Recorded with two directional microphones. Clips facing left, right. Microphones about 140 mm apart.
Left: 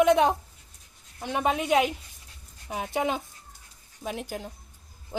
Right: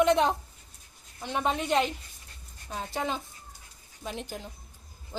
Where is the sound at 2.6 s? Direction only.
15° left (ahead or behind).